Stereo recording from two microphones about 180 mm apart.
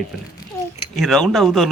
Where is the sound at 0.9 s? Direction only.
Centre (ahead or behind).